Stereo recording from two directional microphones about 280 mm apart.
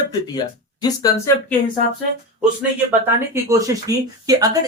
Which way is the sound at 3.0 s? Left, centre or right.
Centre.